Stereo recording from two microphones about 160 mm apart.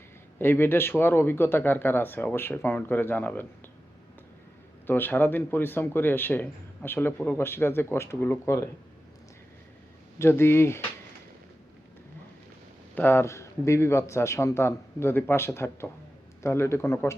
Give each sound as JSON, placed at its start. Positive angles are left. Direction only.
{"t": 0.3, "sound": "speech", "side_deg": 15}
{"t": 4.9, "sound": "speech", "side_deg": 10}
{"t": 10.2, "sound": "speech", "side_deg": 15}
{"t": 13.0, "sound": "speech", "side_deg": 15}